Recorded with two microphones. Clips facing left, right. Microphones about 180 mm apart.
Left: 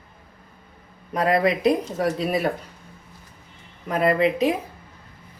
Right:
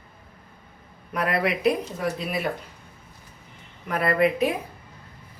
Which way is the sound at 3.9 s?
20° left (ahead or behind).